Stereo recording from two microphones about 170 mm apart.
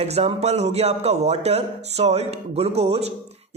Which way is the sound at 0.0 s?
40° right (ahead or behind).